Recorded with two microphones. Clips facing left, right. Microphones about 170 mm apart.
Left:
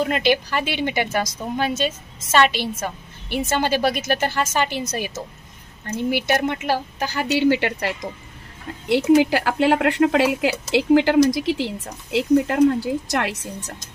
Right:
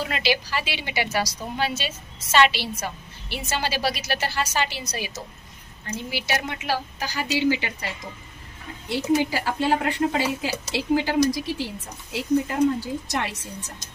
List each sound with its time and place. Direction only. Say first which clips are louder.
0.0 s a woman's voice: left 6 dB; 50° left (ahead or behind)
8.9 s speech: left 7 dB; 75° left (ahead or behind)